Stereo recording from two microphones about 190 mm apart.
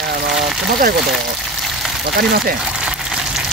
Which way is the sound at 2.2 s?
55° right (ahead or behind).